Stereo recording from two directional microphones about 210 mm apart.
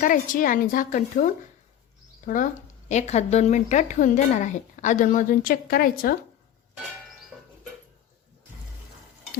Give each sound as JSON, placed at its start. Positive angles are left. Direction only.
{"t": 0.0, "sound": "a woman's voice", "side_deg": 40}
{"t": 2.2, "sound": "a woman's voice", "side_deg": 40}